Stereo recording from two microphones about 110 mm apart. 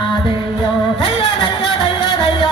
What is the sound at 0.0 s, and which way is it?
Music, 50° left (ahead or behind).